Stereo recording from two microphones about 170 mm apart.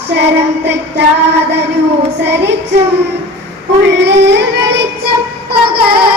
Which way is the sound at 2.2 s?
90° right.